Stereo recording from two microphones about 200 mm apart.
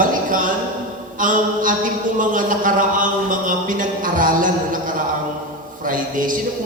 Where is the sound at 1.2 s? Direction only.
40° right (ahead or behind).